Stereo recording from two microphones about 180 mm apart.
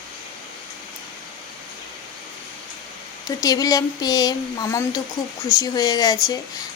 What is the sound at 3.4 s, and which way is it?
A woman's voice, 20° left (ahead or behind).